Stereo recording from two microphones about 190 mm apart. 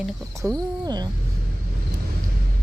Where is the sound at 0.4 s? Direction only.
20° right (ahead or behind).